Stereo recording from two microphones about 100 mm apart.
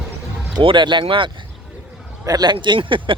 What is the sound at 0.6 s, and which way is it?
Speech, 50° right (ahead or behind).